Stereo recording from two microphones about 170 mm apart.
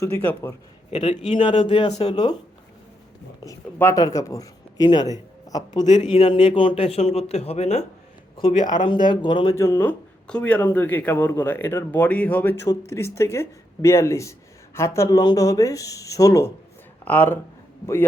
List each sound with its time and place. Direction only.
0.0 s speech: 10° left (ahead or behind)
0.9 s a man's voice: 40° left (ahead or behind)
1.3 s a man's voice: 30° left (ahead or behind)
3.4 s speech: 15° left (ahead or behind)
5.8 s speech: 45° left (ahead or behind)
6.2 s a man's voice: 30° left (ahead or behind)
8.4 s speech: 30° left (ahead or behind)
9.6 s speech: 15° left (ahead or behind)